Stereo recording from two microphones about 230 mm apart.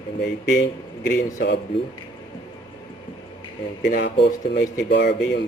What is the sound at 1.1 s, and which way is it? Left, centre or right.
Speech, left.